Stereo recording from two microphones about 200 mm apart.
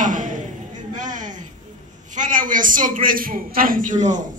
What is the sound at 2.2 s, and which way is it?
A man's voice, 40° right (ahead or behind).